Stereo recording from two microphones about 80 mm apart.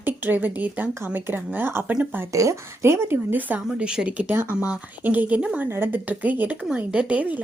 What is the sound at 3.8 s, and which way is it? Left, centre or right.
Speech, centre.